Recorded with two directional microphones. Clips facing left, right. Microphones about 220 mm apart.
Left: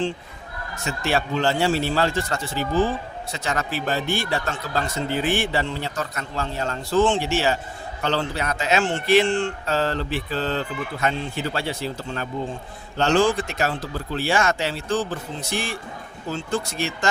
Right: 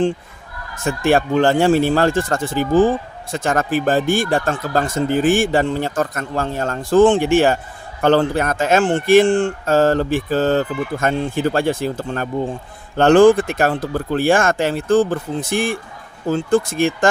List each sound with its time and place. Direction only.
0.9 s speech: 50° right (ahead or behind)